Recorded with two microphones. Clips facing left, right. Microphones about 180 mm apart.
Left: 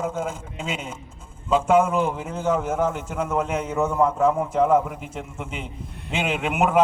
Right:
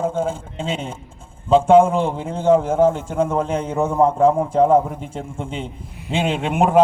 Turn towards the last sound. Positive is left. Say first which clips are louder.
# right 4 dB
turn(degrees=-30)  # may be behind; listen again after turning